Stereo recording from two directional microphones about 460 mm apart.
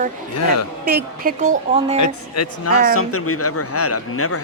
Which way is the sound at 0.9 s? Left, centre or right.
Centre.